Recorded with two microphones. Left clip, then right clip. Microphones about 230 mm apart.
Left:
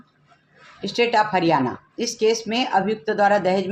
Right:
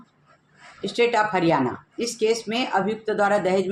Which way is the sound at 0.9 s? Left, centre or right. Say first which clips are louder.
Left 1 dB; left.